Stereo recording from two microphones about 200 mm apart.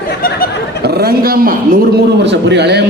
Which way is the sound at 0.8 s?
50° right (ahead or behind).